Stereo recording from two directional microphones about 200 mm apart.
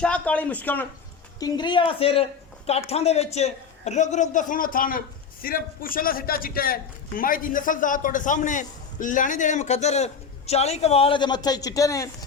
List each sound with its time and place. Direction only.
0.0 s speech: 5° left (ahead or behind)
1.4 s a man's voice: 20° left (ahead or behind)